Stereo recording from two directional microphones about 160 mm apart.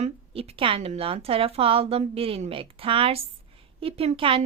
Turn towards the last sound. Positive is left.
turn(degrees=-35)  # may be behind; listen again after turning